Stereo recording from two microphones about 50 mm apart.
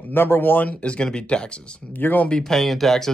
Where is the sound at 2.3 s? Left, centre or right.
Centre.